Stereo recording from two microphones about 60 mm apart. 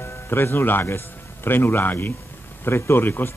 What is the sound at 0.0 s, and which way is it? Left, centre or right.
A man's voice, left.